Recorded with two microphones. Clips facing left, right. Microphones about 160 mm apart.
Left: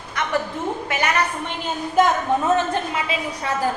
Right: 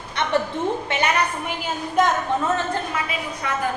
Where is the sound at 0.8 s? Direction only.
25° right (ahead or behind).